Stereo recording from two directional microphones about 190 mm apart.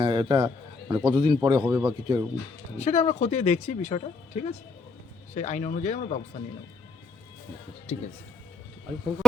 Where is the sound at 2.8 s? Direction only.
35° left (ahead or behind).